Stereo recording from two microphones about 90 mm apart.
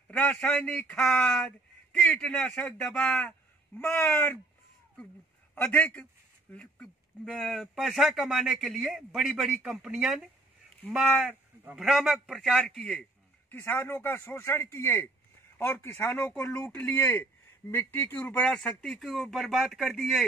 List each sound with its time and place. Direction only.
0.2 s a man's voice: 15° left (ahead or behind)
3.7 s speech: 25° left (ahead or behind)
5.5 s speech: 20° left (ahead or behind)
13.5 s speech: 25° left (ahead or behind)
18.5 s speech: 10° left (ahead or behind)